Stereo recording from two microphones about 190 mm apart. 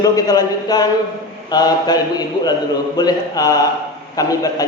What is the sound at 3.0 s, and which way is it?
A man's voice, 20° left (ahead or behind).